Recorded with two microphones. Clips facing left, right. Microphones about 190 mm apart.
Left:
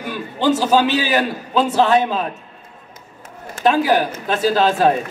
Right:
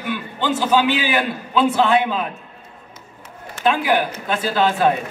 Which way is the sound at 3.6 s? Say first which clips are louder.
Left 3 dB; 40° left (ahead or behind).